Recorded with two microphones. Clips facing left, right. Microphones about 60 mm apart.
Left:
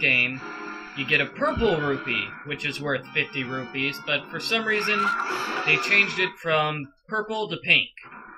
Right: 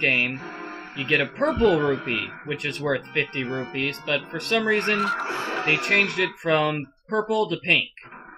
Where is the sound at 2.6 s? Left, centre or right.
Right.